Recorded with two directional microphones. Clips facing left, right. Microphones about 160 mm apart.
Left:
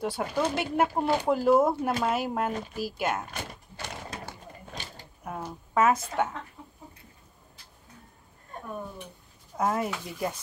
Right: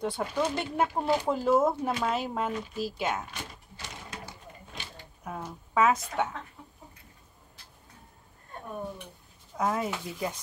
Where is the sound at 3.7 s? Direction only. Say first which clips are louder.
Left 5 dB; 55° left (ahead or behind).